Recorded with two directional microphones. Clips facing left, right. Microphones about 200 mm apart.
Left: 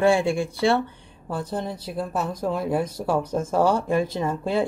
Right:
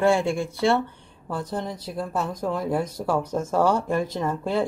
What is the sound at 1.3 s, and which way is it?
A woman's voice, 5° left (ahead or behind).